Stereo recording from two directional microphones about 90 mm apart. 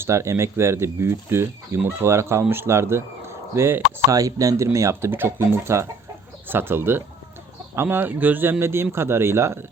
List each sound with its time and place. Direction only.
0.0 s speech: 30° right (ahead or behind)
4.1 s speech: 40° right (ahead or behind)